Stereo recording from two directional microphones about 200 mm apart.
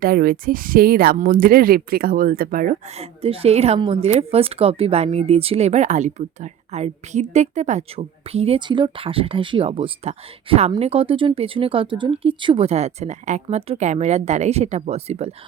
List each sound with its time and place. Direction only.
0.0 s speech: 45° right (ahead or behind)
3.0 s speech: 30° right (ahead or behind)